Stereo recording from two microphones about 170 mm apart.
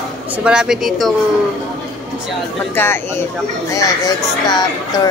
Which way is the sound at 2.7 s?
15° left (ahead or behind).